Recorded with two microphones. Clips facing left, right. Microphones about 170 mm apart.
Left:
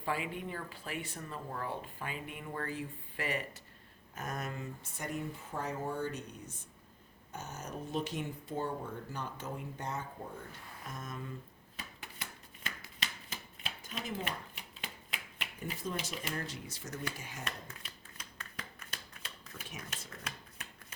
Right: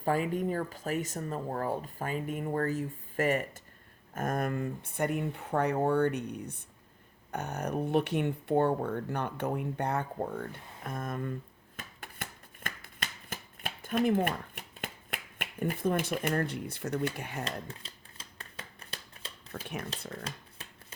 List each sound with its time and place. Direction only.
0.0 s speech: 45° right (ahead or behind)
11.8 s shuffling cards: 50° right (ahead or behind)
17.2 s speech: 60° right (ahead or behind)
17.4 s shuffling cards: 30° right (ahead or behind)